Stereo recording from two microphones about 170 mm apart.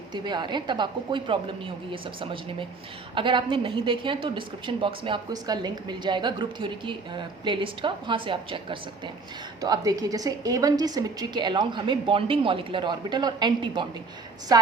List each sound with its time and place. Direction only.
0.1 s a woman's voice: 25° right (ahead or behind)